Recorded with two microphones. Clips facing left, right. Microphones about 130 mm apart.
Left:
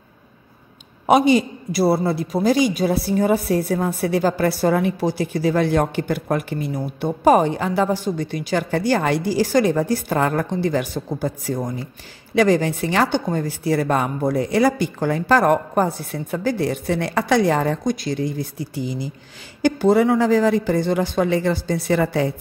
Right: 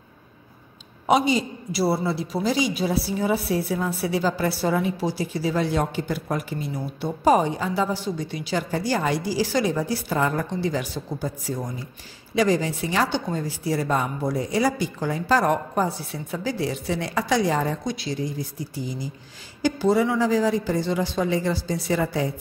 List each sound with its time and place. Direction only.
1.0 s a man's voice: 60° left (ahead or behind)
19.6 s a man's voice: 60° left (ahead or behind)